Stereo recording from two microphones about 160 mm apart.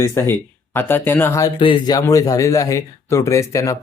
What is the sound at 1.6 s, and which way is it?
Speech, 30° left (ahead or behind).